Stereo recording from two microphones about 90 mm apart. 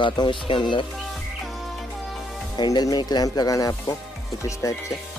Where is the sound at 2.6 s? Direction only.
45° left (ahead or behind).